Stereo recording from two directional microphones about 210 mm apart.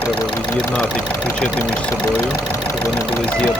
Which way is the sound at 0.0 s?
10° left (ahead or behind).